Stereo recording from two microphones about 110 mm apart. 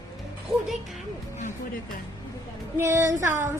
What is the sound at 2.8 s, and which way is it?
Music, 25° right (ahead or behind).